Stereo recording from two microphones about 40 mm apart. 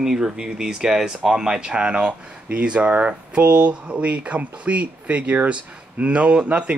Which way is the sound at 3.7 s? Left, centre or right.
Right.